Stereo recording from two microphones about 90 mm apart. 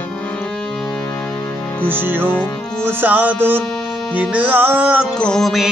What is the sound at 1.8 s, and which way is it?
Music, 25° right (ahead or behind).